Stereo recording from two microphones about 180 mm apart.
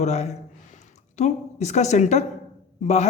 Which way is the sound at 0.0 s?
40° left (ahead or behind).